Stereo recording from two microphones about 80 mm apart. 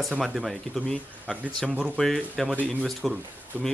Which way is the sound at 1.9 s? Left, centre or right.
Centre.